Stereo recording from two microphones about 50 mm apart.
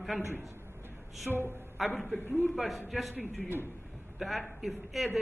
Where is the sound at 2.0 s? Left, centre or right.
Left.